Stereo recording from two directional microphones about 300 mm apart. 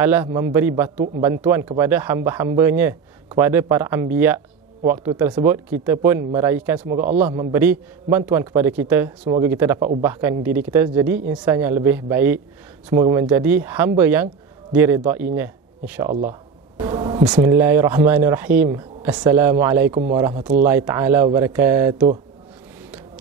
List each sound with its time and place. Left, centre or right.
0.0 s a man's voice: centre
0.9 s speech: right
1.2 s a man's voice: centre
16.8 s a sound: centre
17.2 s a man's voice: centre